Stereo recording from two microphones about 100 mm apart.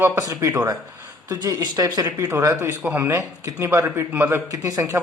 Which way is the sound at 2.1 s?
30° right (ahead or behind).